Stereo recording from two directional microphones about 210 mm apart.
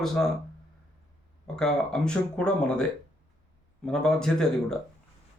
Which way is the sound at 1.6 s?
5° left (ahead or behind).